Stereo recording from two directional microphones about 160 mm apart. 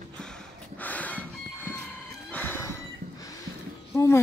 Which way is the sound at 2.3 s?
15° left (ahead or behind).